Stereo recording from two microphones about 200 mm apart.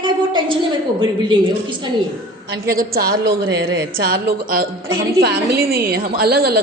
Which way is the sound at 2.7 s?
50° right (ahead or behind).